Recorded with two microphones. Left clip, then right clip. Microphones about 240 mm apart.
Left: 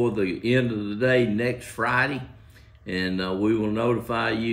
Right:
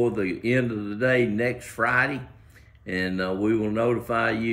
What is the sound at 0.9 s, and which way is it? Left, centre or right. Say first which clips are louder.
Speech: left 1 dB; centre.